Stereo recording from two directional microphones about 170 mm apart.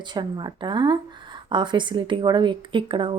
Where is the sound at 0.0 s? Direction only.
25° right (ahead or behind).